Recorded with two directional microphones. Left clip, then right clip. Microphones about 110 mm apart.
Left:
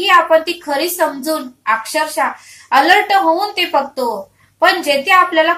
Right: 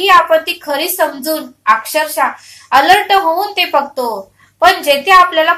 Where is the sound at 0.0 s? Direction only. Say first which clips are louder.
Right 2 dB; 30° right (ahead or behind).